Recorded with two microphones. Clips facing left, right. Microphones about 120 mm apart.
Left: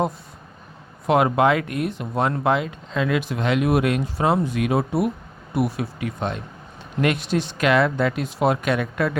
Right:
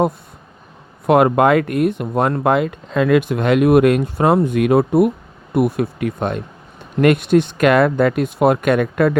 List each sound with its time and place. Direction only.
1.0 s speech: 55° right (ahead or behind)